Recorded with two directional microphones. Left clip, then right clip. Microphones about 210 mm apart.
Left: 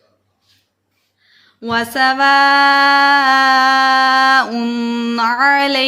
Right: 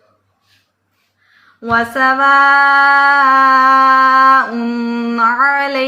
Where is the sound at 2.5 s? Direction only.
60° left (ahead or behind).